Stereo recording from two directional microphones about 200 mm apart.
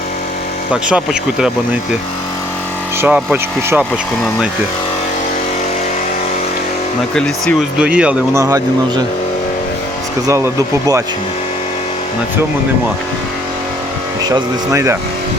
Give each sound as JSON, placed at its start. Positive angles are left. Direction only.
{"t": 0.7, "sound": "speech", "side_deg": -5}
{"t": 3.0, "sound": "speech", "side_deg": -5}
{"t": 7.1, "sound": "speech", "side_deg": 5}
{"t": 10.2, "sound": "speech", "side_deg": -15}
{"t": 14.3, "sound": "speech", "side_deg": -15}